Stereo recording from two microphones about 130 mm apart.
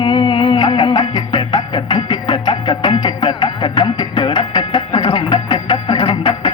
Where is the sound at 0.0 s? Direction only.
40° left (ahead or behind).